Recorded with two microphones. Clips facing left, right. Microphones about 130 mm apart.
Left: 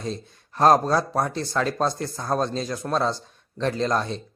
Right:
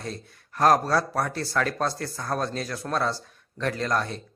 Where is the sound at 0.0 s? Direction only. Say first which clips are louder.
Left 4 dB; 25° left (ahead or behind).